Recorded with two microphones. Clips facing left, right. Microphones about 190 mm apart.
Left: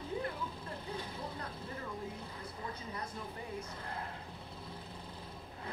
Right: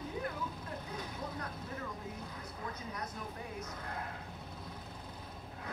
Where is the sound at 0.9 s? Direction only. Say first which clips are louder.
Right 2 dB; 30° left (ahead or behind).